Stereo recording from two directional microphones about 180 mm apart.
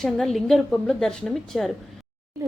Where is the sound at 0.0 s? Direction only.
Centre (ahead or behind).